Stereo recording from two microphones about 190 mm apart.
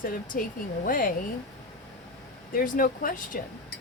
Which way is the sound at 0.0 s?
45° left (ahead or behind).